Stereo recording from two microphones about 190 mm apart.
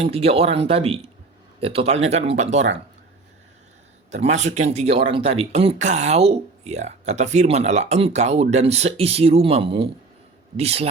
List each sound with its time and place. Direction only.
0.0 s speech: 30° right (ahead or behind)
4.1 s speech: 35° right (ahead or behind)